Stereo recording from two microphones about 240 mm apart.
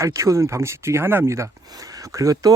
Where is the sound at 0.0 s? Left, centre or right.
Centre.